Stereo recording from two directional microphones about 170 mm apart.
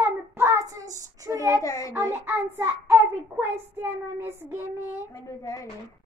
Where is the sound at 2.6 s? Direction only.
10° right (ahead or behind).